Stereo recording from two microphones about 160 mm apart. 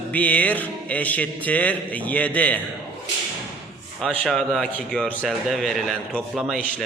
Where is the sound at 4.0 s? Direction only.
5° left (ahead or behind).